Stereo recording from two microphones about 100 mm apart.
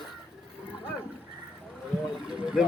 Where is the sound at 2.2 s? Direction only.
5° right (ahead or behind).